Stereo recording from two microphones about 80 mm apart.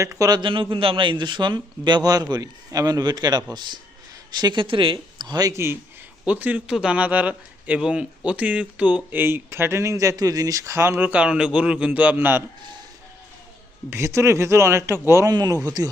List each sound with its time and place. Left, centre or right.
0.0 s speech: right
0.3 s a man's voice: right
5.5 s speech: right
6.2 s a man's voice: centre; by 10.9 s right
10.9 s a man's voice: centre
13.9 s speech: right
15.3 s speech: right